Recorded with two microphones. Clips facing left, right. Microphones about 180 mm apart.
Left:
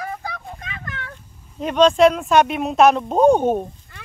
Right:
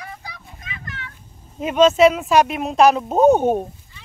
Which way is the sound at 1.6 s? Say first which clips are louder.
Even; 5° right (ahead or behind).